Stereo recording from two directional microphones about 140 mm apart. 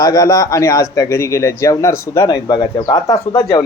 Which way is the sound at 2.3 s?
30° left (ahead or behind).